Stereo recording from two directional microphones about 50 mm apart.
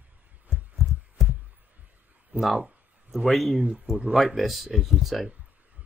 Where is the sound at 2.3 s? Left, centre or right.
Right.